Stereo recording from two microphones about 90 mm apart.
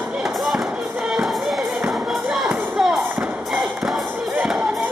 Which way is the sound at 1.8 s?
5° right (ahead or behind).